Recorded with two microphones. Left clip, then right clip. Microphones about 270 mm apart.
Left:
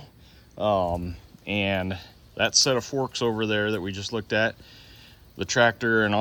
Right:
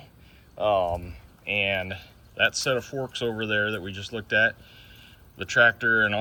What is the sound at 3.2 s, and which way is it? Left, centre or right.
Speech, left.